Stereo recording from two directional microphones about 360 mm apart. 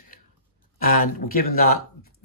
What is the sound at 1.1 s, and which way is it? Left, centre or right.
Speech, left.